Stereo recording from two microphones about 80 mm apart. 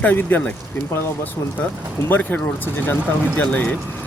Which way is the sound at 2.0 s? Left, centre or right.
Left.